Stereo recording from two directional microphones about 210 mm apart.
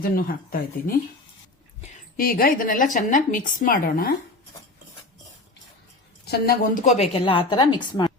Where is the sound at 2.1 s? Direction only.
45° left (ahead or behind).